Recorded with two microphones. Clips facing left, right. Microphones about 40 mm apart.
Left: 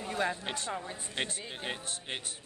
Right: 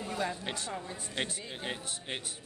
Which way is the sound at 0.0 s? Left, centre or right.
Centre.